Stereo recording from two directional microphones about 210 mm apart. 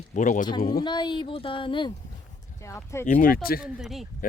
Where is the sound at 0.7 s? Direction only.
20° left (ahead or behind).